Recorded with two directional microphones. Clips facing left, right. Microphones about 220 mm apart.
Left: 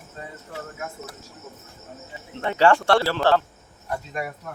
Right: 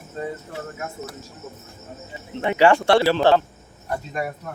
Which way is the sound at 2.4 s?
15° right (ahead or behind).